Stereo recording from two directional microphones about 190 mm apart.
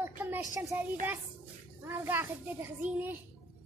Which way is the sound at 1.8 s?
10° right (ahead or behind).